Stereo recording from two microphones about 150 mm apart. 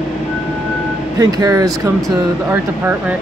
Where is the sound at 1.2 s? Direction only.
25° right (ahead or behind).